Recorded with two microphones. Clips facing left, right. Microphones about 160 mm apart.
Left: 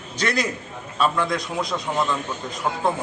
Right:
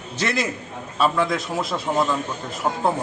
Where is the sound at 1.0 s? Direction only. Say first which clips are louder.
Right 1 dB; 5° right (ahead or behind).